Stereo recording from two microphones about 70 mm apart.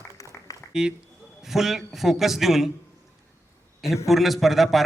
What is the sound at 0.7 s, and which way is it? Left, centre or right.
A man's voice, centre.